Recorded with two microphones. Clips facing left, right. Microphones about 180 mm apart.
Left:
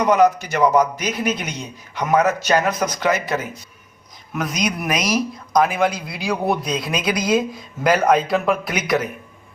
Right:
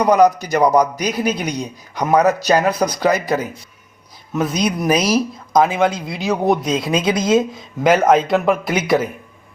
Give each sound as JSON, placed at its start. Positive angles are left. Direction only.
{"t": 0.0, "sound": "a man's voice", "side_deg": -40}